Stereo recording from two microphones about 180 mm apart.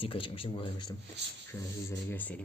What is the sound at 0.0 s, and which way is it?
Speech, 30° left (ahead or behind).